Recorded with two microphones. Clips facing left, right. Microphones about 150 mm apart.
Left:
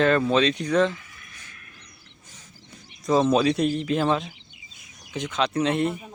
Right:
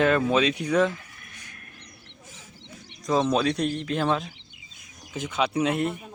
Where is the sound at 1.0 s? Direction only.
45° right (ahead or behind).